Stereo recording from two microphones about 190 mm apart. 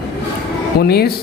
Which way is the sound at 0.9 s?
55° left (ahead or behind).